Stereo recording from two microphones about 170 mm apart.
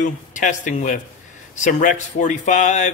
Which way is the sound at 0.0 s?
50° left (ahead or behind).